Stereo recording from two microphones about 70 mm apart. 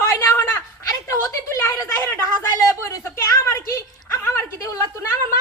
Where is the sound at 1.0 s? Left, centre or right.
Left.